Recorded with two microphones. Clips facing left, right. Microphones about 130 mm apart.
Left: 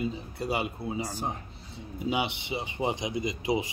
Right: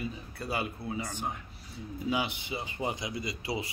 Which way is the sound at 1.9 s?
20° left (ahead or behind).